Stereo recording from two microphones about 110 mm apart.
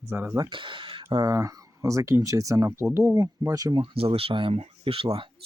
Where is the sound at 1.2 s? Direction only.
30° right (ahead or behind).